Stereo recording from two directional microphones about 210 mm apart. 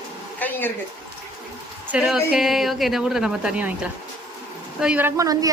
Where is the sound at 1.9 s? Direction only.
5° right (ahead or behind).